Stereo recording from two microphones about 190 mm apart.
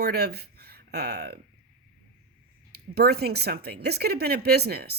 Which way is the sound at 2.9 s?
55° right (ahead or behind).